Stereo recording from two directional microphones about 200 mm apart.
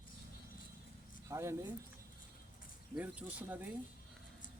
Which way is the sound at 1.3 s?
15° right (ahead or behind).